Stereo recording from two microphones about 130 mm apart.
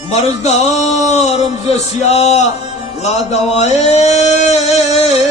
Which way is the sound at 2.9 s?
55° left (ahead or behind).